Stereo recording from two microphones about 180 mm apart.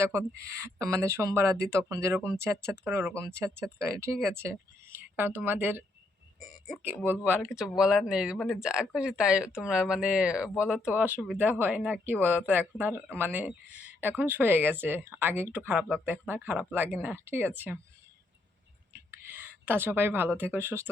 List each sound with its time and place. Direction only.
0.0 s speech: 15° right (ahead or behind)
19.1 s speech: 10° right (ahead or behind)